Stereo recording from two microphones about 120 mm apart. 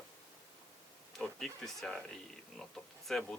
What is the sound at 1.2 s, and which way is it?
Speech, 5° left (ahead or behind).